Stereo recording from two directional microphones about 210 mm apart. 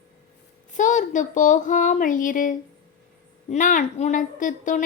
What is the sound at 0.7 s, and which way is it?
A woman's voice, 35° left (ahead or behind).